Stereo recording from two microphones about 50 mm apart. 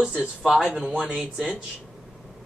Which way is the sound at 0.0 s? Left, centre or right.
Right.